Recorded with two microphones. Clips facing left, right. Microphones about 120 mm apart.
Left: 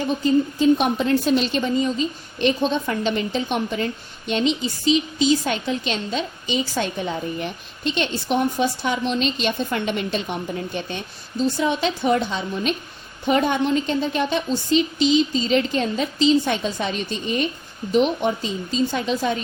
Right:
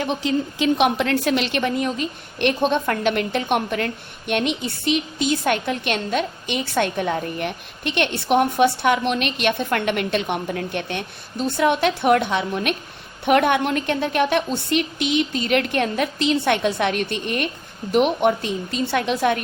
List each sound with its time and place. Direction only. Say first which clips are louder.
0.0 s a woman's voice: left 3 dB; 75° right (ahead or behind)